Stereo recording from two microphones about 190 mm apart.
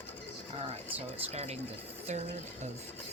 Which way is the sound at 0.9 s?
35° right (ahead or behind).